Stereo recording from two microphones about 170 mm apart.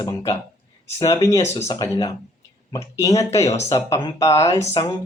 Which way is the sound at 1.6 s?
20° left (ahead or behind).